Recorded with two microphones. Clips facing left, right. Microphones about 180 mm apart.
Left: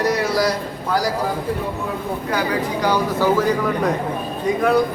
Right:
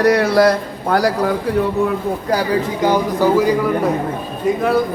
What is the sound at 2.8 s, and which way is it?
Speech, 15° right (ahead or behind).